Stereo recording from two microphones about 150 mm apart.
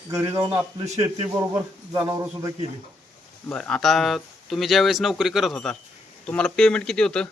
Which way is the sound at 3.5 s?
5° left (ahead or behind).